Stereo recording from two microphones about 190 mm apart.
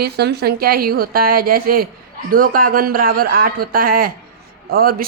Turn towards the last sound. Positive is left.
turn(degrees=-50)  # may be behind; listen again after turning